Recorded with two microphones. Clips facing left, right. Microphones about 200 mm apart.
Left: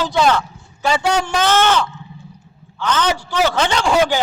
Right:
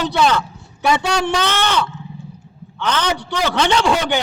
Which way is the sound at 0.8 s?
65° right (ahead or behind).